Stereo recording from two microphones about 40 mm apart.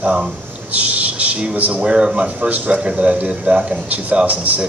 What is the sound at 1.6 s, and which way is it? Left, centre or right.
Speech, right.